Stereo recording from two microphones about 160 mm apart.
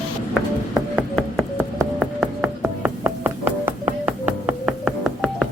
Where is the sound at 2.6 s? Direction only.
10° right (ahead or behind).